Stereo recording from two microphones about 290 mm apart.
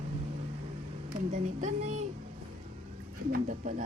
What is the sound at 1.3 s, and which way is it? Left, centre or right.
Speech, right.